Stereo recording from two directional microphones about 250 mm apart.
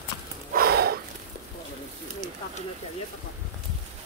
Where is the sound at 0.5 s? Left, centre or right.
Right.